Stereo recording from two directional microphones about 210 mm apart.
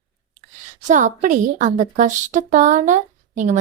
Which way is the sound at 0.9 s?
35° right (ahead or behind).